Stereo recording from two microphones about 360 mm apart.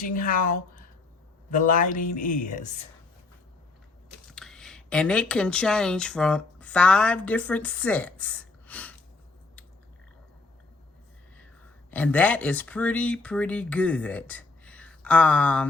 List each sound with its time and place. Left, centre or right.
0.0 s speech: left
4.3 s speech: centre
11.9 s speech: centre